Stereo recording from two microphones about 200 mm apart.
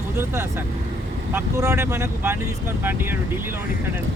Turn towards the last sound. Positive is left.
turn(degrees=-10)  # may be behind; listen again after turning